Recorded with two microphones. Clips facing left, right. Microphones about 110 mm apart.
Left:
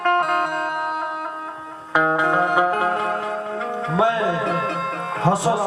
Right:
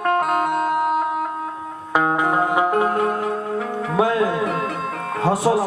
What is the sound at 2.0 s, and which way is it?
Music, 25° right (ahead or behind).